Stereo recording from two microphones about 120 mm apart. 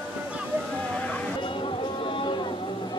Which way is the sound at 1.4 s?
45° left (ahead or behind).